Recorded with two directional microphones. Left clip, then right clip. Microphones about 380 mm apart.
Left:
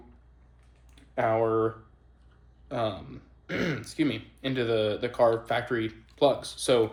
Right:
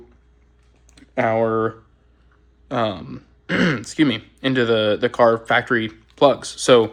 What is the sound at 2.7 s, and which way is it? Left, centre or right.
Speech, centre.